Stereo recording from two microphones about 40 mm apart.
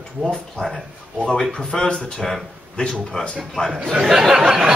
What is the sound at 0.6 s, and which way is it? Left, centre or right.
A man's voice, centre.